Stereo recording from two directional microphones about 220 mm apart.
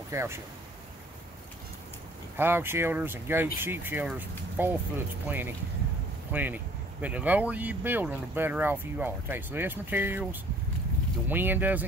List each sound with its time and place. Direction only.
0.1 s speech: 10° right (ahead or behind)
2.3 s speech: 10° right (ahead or behind)
11.2 s speech: 10° right (ahead or behind)